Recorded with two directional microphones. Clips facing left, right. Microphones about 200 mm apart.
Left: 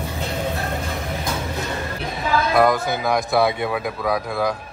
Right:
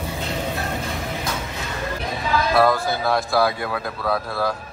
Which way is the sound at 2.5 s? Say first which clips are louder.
Even; 20° left (ahead or behind).